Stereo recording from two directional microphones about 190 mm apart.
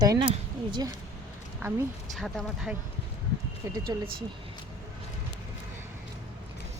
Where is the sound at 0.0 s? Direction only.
20° right (ahead or behind).